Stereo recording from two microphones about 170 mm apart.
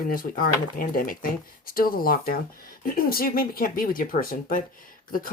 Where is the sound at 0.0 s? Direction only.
55° left (ahead or behind).